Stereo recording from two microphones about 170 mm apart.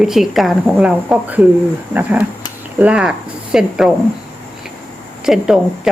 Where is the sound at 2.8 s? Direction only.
5° right (ahead or behind).